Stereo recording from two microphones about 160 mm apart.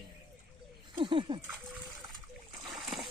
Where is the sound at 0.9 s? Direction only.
30° right (ahead or behind).